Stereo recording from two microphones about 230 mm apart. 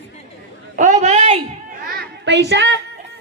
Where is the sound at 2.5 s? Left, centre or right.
Right.